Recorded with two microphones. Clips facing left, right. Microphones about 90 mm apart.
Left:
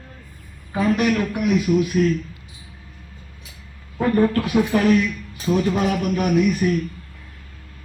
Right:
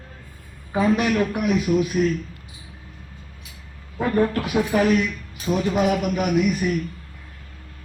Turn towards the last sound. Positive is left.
turn(degrees=-15)  # may be behind; listen again after turning